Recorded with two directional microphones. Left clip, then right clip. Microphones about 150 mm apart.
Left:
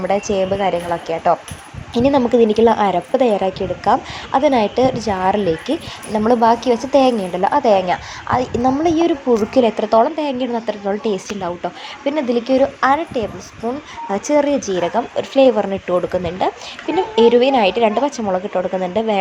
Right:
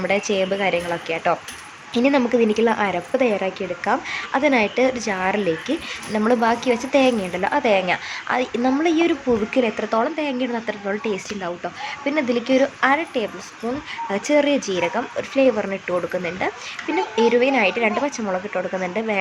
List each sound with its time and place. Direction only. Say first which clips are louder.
0.0 s a woman's voice: left 3 dB; centre (ahead or behind)
9.6 s speech: left 7 dB; 20° left (ahead or behind)